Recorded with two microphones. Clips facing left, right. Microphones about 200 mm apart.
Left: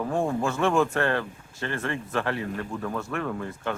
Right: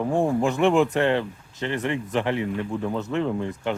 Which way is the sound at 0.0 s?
20° right (ahead or behind).